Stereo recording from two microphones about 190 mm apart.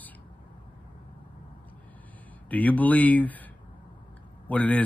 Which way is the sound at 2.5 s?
10° left (ahead or behind).